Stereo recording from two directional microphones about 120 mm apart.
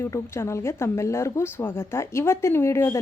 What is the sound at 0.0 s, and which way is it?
Speech, 20° left (ahead or behind).